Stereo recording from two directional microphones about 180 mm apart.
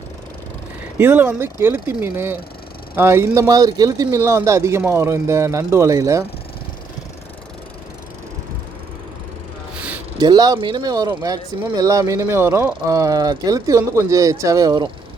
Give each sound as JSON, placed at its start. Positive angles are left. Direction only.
{"t": 0.9, "sound": "speech", "side_deg": -10}
{"t": 9.7, "sound": "a sound", "side_deg": -10}
{"t": 10.2, "sound": "speech", "side_deg": -25}